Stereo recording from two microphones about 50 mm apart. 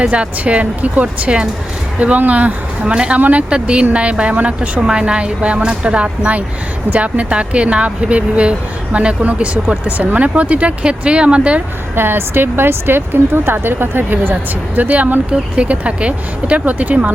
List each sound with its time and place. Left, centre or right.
0.1 s speech: right
2.9 s speech: centre
3.2 s speech: right
3.5 s speech: right
11.9 s speech: right
14.8 s speech: right